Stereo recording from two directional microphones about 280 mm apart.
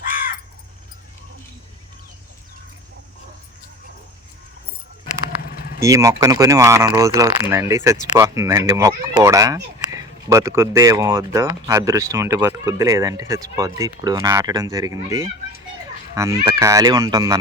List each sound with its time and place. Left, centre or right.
0.0 s caw: left
5.5 s vehicle: left
5.8 s speech: centre